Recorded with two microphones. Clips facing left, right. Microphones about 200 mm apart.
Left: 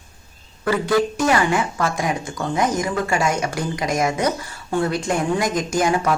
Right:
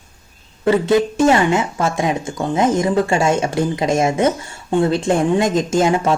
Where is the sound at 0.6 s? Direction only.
25° right (ahead or behind).